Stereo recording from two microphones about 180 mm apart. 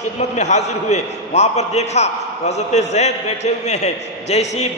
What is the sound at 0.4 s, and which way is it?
A man's voice, 40° left (ahead or behind).